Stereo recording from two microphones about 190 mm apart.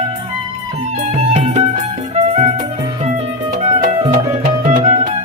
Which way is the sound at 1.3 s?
40° right (ahead or behind).